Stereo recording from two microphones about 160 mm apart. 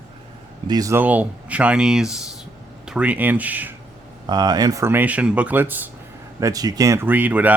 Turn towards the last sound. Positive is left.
turn(degrees=-10)  # may be behind; listen again after turning